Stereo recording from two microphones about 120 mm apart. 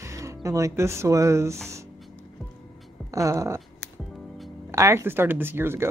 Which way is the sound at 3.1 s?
25° right (ahead or behind).